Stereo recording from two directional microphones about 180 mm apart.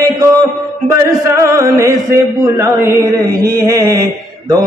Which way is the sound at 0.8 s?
15° right (ahead or behind).